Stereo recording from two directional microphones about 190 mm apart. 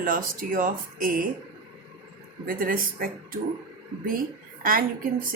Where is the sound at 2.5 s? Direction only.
50° right (ahead or behind).